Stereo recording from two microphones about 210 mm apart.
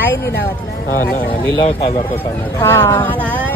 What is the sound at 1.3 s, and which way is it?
Speech, 25° left (ahead or behind).